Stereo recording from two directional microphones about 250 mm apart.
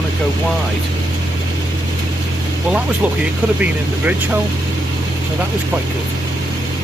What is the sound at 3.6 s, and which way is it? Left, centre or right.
Speech, centre.